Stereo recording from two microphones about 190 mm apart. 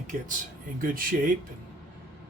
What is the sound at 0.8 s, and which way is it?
Speech, 50° right (ahead or behind).